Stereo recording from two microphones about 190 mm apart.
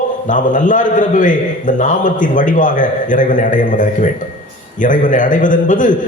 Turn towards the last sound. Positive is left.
turn(degrees=45)  # may be behind; listen again after turning